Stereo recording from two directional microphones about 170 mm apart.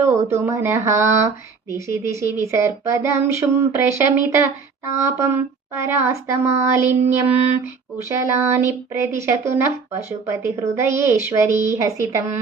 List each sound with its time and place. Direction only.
0.0 s speech: 15° right (ahead or behind)